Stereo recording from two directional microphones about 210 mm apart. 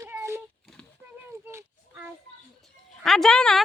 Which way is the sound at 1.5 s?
10° right (ahead or behind).